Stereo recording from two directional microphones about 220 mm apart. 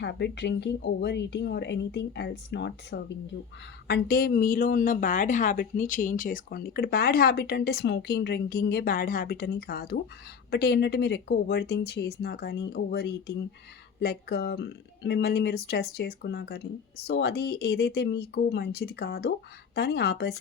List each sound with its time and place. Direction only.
0.0 s a woman's voice: 50° left (ahead or behind)